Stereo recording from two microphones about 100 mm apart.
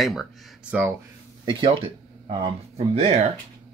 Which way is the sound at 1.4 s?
60° right (ahead or behind).